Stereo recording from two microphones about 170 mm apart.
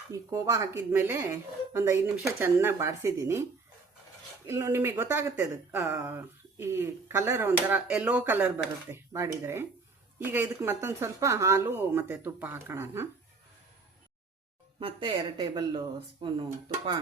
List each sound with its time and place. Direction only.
0.1 s speech: 20° right (ahead or behind)
4.4 s speech: 20° right (ahead or behind)
14.8 s speech: 30° right (ahead or behind)